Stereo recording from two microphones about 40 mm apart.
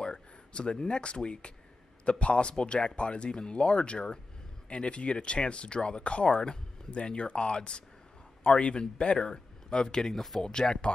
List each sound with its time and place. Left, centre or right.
0.0 s speech: left